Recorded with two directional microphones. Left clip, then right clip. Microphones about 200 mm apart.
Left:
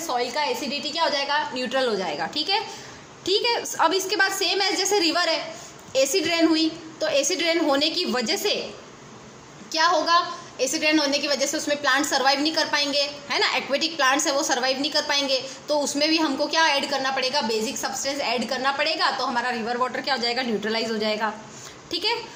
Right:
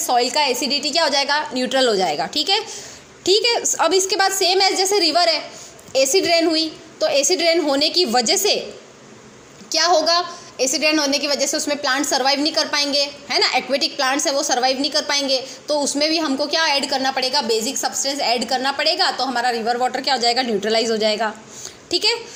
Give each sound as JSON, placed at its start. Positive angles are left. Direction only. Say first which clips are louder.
{"t": 0.1, "sound": "a woman's voice", "louder": "right 7 dB", "side_deg": -25}
{"t": 9.6, "sound": "a woman's voice", "louder": "right 4 dB", "side_deg": -15}